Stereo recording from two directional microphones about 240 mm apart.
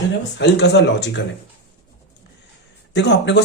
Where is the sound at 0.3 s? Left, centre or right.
Left.